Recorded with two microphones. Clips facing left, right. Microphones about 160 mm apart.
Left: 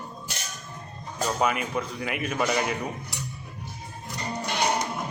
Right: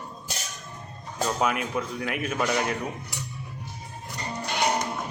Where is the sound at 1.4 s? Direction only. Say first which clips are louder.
Left 1 dB; centre (ahead or behind).